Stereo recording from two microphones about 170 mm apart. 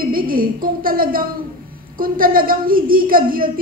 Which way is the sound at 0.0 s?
60° right (ahead or behind).